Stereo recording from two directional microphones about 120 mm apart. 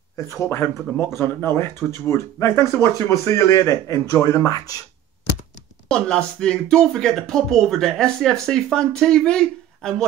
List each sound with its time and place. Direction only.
0.3 s speech: 25° left (ahead or behind)
5.9 s speech: 5° left (ahead or behind)